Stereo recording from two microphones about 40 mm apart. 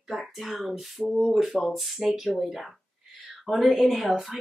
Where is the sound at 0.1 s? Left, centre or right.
Centre.